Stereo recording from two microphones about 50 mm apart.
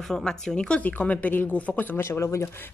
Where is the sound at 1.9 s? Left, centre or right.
Left.